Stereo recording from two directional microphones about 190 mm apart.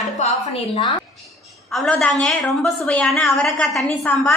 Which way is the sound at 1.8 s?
5° left (ahead or behind).